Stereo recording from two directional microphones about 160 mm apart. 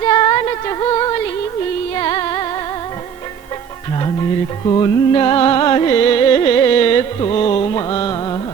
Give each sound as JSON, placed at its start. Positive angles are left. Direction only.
{"t": 0.0, "sound": "music", "side_deg": 30}
{"t": 4.0, "sound": "music", "side_deg": 30}